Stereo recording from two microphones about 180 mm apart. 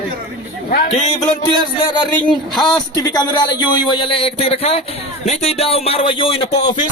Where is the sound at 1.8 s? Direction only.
25° left (ahead or behind).